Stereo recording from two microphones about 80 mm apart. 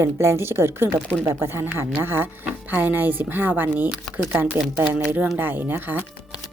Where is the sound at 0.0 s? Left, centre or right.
Right.